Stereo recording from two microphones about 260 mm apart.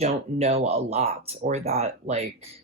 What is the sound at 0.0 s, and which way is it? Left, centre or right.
Speech, right.